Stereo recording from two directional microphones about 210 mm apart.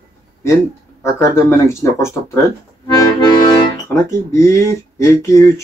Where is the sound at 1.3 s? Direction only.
10° left (ahead or behind).